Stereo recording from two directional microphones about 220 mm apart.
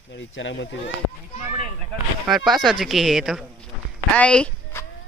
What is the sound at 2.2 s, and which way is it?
Speech, centre (ahead or behind).